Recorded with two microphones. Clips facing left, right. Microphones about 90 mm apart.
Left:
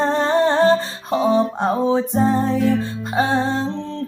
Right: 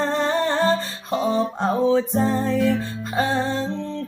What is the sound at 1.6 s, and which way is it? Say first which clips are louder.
Music: left 1 dB; 25° left (ahead or behind).